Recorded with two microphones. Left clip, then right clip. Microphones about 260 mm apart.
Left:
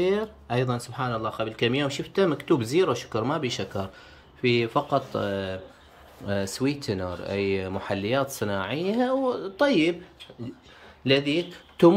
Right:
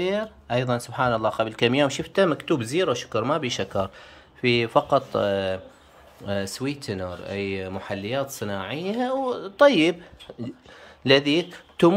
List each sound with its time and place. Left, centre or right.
0.0 s speech: centre
11.1 s speech: centre